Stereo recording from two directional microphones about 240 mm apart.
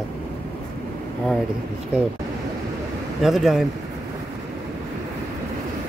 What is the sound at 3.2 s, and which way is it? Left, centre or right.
Speech, centre.